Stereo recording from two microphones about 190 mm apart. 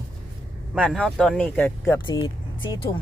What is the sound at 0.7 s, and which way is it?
Speech, centre (ahead or behind).